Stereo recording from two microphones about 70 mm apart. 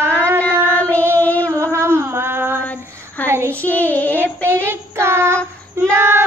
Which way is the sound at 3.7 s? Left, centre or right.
Left.